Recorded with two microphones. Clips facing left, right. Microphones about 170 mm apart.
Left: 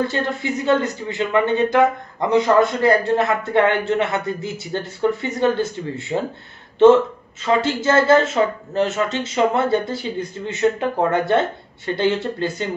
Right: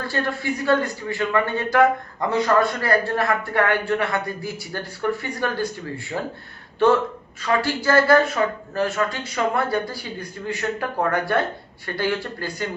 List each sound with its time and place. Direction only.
0.0 s speech: 20° left (ahead or behind)
7.4 s speech: 20° left (ahead or behind)